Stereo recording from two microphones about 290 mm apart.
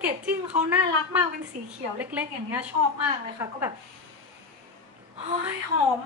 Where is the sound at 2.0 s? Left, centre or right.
Centre.